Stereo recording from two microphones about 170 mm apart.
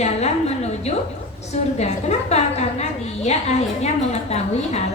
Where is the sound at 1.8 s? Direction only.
40° left (ahead or behind).